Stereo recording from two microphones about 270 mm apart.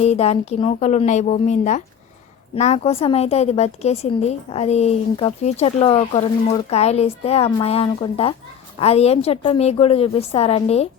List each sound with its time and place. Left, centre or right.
0.0 s a woman's voice: left